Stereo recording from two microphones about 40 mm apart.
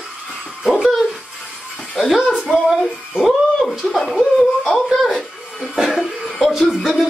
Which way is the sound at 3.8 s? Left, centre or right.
Centre.